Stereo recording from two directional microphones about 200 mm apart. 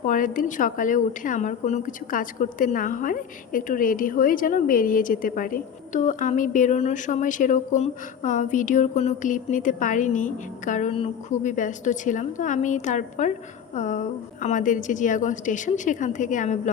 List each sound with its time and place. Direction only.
0.0 s speech: 40° left (ahead or behind)